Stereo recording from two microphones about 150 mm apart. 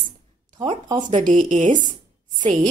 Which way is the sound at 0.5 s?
30° right (ahead or behind).